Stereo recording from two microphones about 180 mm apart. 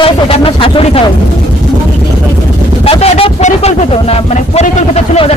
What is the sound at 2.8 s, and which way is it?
Speech, 35° left (ahead or behind).